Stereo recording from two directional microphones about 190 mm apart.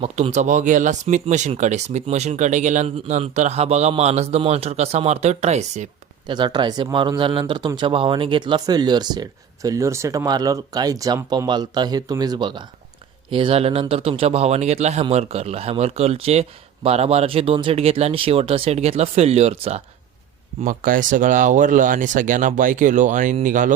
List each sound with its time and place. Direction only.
0.0 s speech: 35° right (ahead or behind)
6.2 s speech: 25° right (ahead or behind)
20.7 s speech: 45° right (ahead or behind)